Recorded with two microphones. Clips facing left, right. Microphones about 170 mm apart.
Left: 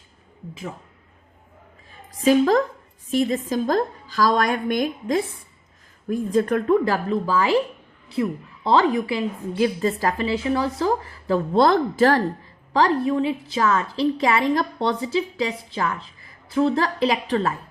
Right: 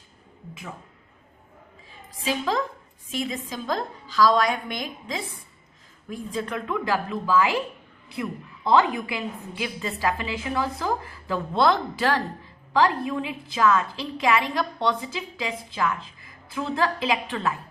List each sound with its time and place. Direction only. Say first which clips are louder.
2.2 s a woman's voice: left 9 dB; 45° left (ahead or behind)